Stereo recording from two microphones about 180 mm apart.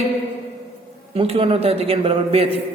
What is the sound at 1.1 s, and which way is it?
A man's voice, 30° right (ahead or behind).